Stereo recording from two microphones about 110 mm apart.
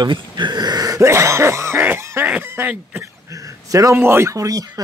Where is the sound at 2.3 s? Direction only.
20° right (ahead or behind).